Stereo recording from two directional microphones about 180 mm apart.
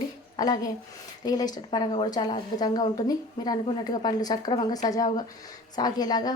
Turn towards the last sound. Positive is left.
turn(degrees=20)  # may be behind; listen again after turning